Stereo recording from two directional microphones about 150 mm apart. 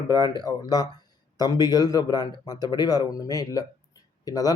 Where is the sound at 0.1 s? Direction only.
25° left (ahead or behind).